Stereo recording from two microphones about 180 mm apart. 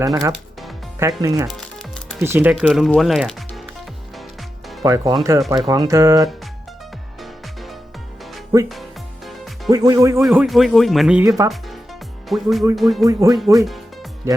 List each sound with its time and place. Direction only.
0.0 s speech: 20° right (ahead or behind)
1.5 s music: centre (ahead or behind)
2.1 s speech: 15° right (ahead or behind)
2.6 s speech: centre (ahead or behind)
4.8 s speech: 20° right (ahead or behind)
7.2 s music: centre (ahead or behind)
9.6 s speech: 20° right (ahead or behind)
10.2 s speech: centre (ahead or behind)
11.2 s speech: 20° right (ahead or behind)
12.3 s speech: centre (ahead or behind)
13.1 s speech: 20° right (ahead or behind)
13.6 s music: centre (ahead or behind)